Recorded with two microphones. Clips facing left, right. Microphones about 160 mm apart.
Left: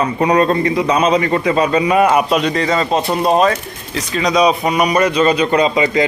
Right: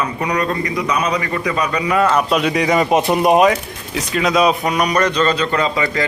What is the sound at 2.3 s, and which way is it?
Speech, 5° right (ahead or behind).